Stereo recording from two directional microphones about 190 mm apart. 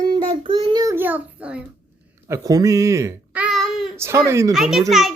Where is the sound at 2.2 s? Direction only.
15° right (ahead or behind).